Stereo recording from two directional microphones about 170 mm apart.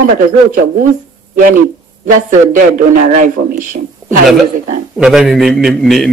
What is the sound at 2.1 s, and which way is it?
A man's voice, 50° right (ahead or behind).